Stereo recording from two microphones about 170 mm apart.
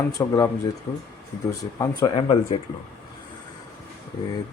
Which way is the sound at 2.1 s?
35° left (ahead or behind).